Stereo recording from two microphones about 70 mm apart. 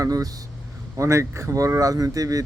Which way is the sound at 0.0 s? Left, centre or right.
Right.